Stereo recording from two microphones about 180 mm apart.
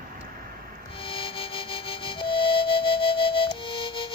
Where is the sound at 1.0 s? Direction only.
30° left (ahead or behind).